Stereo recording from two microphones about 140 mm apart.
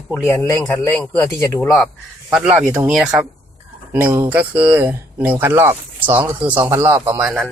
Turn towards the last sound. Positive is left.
turn(degrees=-10)  # may be behind; listen again after turning